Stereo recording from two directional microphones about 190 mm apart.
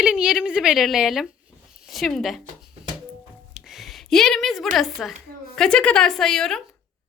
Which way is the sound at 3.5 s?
Centre (ahead or behind).